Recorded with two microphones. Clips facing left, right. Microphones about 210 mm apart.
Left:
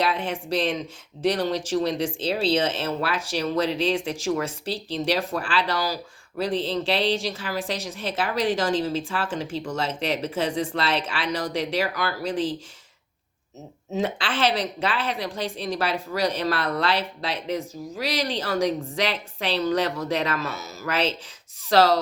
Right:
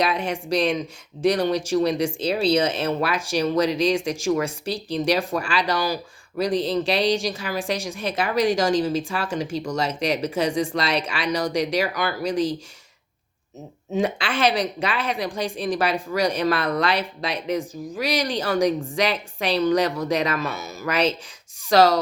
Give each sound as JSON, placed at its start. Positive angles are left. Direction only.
{"t": 0.0, "sound": "a woman's voice", "side_deg": -15}
{"t": 13.9, "sound": "a woman's voice", "side_deg": -15}